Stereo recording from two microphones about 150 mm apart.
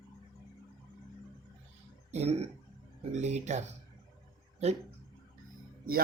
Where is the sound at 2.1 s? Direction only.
45° right (ahead or behind).